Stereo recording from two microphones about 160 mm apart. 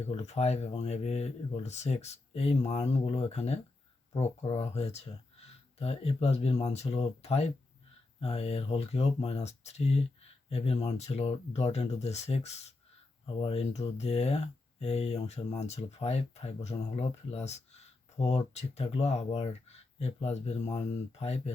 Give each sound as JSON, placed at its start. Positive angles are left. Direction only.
{"t": 0.1, "sound": "speech", "side_deg": 40}